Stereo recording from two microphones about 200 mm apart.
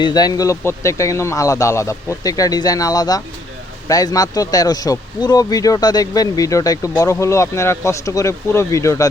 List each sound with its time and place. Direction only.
0.0 s speech: 20° left (ahead or behind)